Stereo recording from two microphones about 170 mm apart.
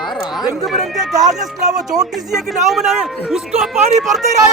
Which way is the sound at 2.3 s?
Centre (ahead or behind).